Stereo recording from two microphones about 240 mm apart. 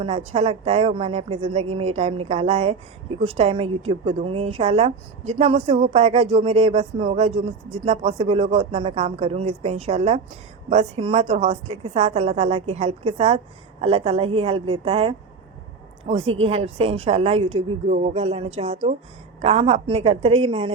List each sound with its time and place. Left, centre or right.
0.0 s a woman's voice: right